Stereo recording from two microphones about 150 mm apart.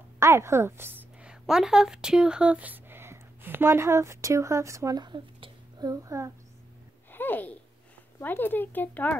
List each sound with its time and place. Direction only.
0.2 s a woman's voice: 15° right (ahead or behind)
7.1 s a sound: 15° left (ahead or behind)
8.2 s speech: 15° left (ahead or behind)